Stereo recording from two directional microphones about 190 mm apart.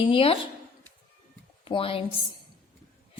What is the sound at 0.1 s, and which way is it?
Speech, 30° left (ahead or behind).